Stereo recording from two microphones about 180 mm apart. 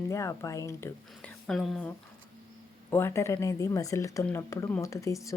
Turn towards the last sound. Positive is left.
turn(degrees=15)  # may be behind; listen again after turning